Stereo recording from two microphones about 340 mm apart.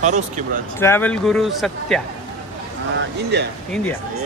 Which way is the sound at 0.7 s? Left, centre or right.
Centre.